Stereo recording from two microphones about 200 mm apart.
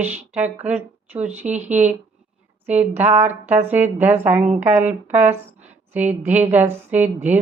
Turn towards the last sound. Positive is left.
turn(degrees=-10)  # may be behind; listen again after turning